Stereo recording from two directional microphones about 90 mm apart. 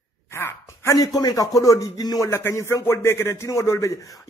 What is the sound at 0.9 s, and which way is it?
A man's voice, 45° left (ahead or behind).